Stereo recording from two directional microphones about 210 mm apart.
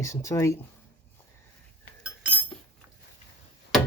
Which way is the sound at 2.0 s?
10° right (ahead or behind).